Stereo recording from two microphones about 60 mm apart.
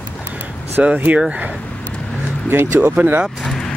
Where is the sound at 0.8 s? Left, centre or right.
Right.